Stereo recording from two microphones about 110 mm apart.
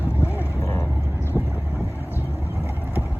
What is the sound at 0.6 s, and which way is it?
Vehicle, 25° left (ahead or behind).